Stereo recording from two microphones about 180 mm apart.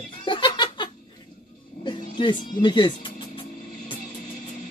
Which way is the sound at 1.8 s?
30° left (ahead or behind).